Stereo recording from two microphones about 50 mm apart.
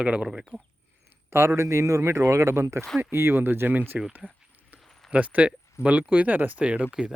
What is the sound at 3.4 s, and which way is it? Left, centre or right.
Speech, right.